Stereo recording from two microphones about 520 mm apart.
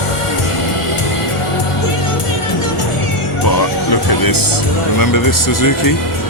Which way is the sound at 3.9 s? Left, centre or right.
Left.